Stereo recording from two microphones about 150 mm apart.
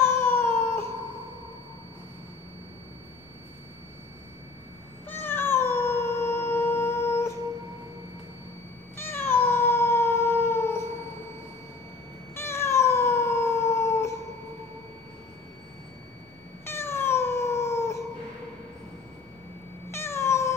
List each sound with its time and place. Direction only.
0.0 s cat: 15° left (ahead or behind)
5.0 s cat: 15° left (ahead or behind)
8.9 s cat: 15° left (ahead or behind)
12.4 s cat: 15° left (ahead or behind)
16.6 s cat: 15° left (ahead or behind)
19.9 s cat: 15° left (ahead or behind)